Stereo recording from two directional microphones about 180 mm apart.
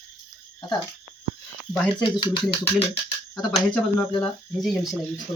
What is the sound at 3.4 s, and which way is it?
Speech, 5° left (ahead or behind).